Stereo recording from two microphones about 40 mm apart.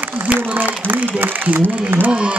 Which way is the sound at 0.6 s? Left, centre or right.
Right.